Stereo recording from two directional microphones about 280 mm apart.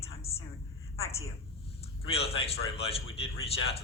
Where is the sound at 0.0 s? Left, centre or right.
Left.